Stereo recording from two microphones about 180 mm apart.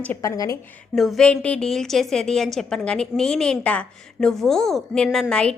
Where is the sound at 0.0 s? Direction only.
15° left (ahead or behind).